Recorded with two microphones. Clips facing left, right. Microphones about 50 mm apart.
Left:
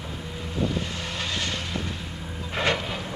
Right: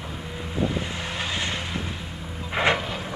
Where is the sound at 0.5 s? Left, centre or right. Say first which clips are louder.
Right 1 dB; centre.